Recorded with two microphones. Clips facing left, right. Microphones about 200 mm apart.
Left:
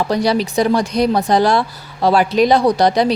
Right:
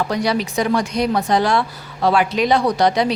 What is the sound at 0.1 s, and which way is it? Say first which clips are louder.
Speech: left 4 dB; 35° left (ahead or behind).